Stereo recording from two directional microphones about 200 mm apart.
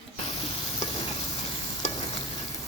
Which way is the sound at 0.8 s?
25° left (ahead or behind).